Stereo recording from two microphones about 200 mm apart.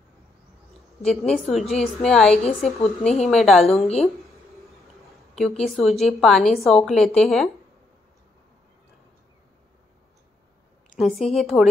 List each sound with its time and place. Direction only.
1.0 s a woman's voice: 5° left (ahead or behind)
2.3 s a woman's voice: 30° left (ahead or behind)
3.2 s a woman's voice: centre (ahead or behind)
3.8 s a woman's voice: 30° left (ahead or behind)
5.7 s a woman's voice: centre (ahead or behind)
11.0 s a woman's voice: centre (ahead or behind)